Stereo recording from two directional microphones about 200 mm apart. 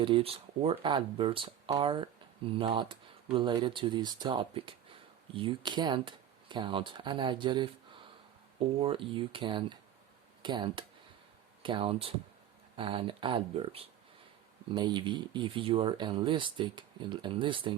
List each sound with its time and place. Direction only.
0.0 s speech: 25° right (ahead or behind)